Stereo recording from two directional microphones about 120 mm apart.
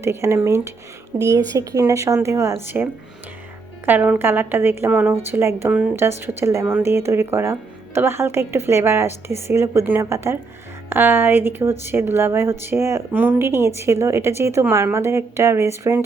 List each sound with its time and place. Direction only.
0.0 s a woman's voice: 20° right (ahead or behind)